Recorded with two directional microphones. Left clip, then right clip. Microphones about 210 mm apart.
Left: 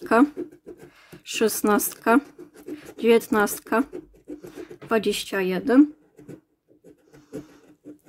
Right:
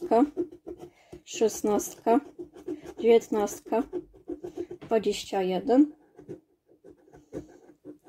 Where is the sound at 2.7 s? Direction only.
35° left (ahead or behind).